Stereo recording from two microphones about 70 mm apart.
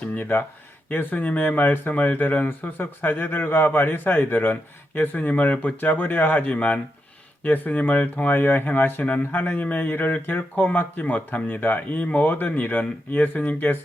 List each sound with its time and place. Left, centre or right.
0.2 s speech: left